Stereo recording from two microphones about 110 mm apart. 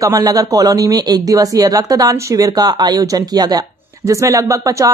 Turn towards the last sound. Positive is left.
turn(degrees=-30)  # may be behind; listen again after turning